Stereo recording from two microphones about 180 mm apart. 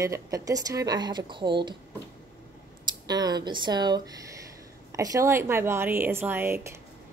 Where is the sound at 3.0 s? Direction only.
20° right (ahead or behind).